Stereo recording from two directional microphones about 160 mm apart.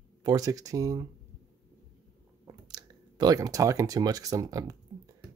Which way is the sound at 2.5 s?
25° right (ahead or behind).